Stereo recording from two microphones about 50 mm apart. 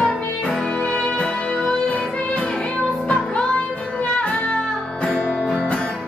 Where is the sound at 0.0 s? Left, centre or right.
Centre.